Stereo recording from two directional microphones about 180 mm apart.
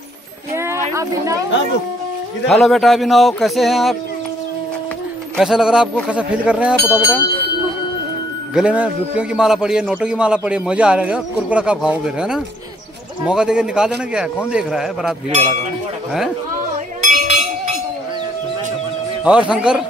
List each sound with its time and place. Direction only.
0.6 s a sound: 15° right (ahead or behind)
2.4 s a man's voice: centre (ahead or behind)
5.4 s a man's voice: 5° right (ahead or behind)
8.5 s a man's voice: 5° right (ahead or behind)
17.1 s cowbell: 40° right (ahead or behind)
19.2 s a man's voice: 5° right (ahead or behind)